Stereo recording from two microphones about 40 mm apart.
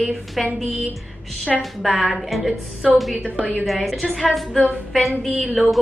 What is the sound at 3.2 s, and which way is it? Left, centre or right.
Speech, right.